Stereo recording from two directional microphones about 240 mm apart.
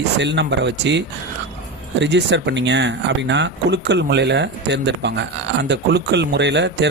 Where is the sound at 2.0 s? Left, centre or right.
Right.